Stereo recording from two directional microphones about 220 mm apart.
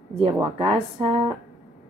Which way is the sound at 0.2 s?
25° right (ahead or behind).